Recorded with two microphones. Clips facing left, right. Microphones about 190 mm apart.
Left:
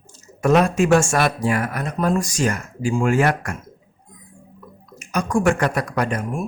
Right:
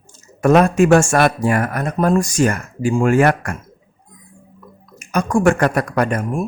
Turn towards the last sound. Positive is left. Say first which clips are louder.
# right 4 dB
turn(degrees=-55)  # may be behind; listen again after turning